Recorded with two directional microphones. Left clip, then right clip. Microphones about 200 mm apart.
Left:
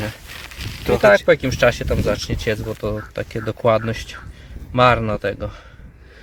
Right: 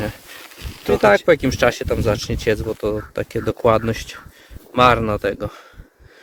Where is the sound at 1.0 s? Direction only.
50° right (ahead or behind).